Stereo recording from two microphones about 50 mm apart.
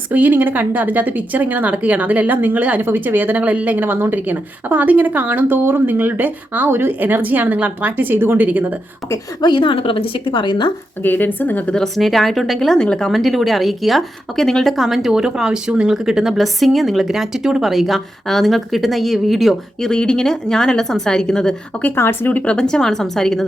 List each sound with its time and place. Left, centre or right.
0.1 s speech: right
2.8 s speech: right
6.7 s speech: right
7.0 s speech: right
8.4 s speech: right
11.0 s speech: left
11.9 s a woman's voice: centre
13.1 s a woman's voice: centre
19.8 s a woman's voice: centre
21.9 s speech: left
22.4 s a woman's voice: centre